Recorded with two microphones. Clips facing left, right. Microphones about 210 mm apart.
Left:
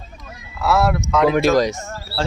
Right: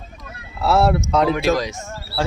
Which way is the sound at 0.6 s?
30° right (ahead or behind).